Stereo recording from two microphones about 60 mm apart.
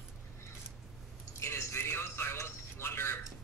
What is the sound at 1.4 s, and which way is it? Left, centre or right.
Speech, left.